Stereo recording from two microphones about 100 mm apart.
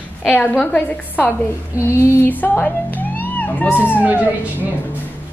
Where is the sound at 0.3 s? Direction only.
15° left (ahead or behind).